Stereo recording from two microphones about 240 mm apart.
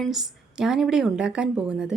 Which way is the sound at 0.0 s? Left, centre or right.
Centre.